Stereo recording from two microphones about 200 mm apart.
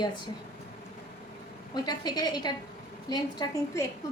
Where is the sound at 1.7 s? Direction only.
20° left (ahead or behind).